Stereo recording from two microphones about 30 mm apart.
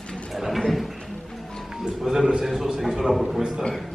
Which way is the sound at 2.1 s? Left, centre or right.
Right.